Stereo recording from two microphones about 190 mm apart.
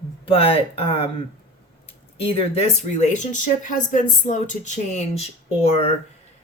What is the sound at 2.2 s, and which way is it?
Speech, 30° left (ahead or behind).